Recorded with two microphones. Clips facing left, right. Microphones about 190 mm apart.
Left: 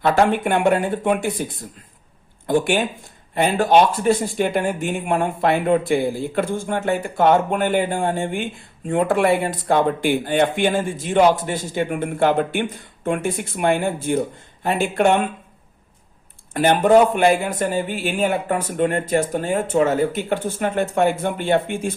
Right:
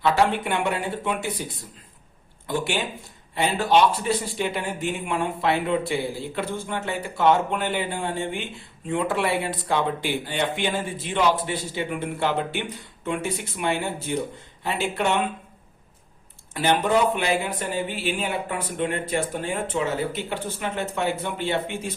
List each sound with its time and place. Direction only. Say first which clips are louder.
0.0 s speech: left 4 dB; 50° left (ahead or behind)
2.5 s speech: left 7 dB; 50° left (ahead or behind)
16.6 s speech: left 7 dB; 50° left (ahead or behind)